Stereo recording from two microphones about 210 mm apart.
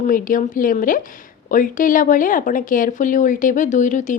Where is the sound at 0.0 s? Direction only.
40° left (ahead or behind).